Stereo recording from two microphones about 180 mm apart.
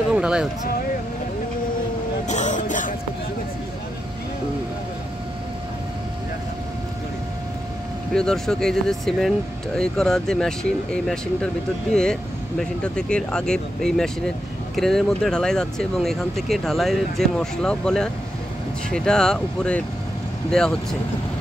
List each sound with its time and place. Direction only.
0.1 s speech: 5° right (ahead or behind)
2.2 s music: 40° left (ahead or behind)
8.1 s speech: 5° left (ahead or behind)